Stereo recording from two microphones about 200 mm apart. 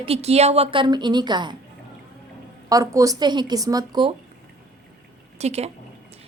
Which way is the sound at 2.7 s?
15° right (ahead or behind).